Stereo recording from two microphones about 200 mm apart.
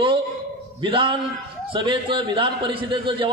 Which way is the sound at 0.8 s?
25° right (ahead or behind).